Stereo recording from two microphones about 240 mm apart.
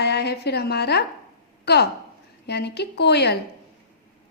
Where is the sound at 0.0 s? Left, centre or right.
Left.